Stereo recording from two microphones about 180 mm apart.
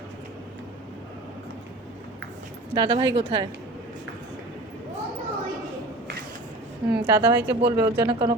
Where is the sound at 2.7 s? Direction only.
25° right (ahead or behind).